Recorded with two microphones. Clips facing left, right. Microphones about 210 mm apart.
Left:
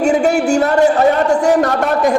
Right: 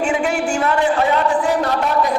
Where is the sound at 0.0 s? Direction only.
40° left (ahead or behind).